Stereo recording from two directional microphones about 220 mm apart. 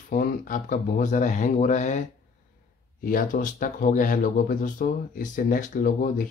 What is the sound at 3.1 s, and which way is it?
Speech, 40° left (ahead or behind).